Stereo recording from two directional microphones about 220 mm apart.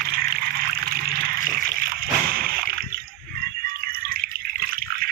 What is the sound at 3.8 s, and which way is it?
Drip, 40° right (ahead or behind).